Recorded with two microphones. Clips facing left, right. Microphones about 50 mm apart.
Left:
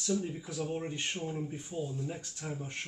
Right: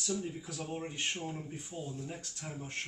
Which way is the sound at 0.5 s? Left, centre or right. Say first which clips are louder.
Left 6 dB; centre.